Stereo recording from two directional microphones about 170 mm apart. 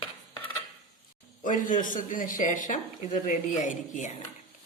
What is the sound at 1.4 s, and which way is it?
Speech, 50° left (ahead or behind).